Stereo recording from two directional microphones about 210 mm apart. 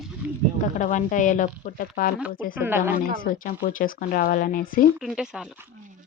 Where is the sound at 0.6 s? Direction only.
35° left (ahead or behind).